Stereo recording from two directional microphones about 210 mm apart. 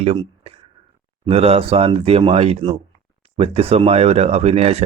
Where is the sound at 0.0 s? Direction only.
25° right (ahead or behind).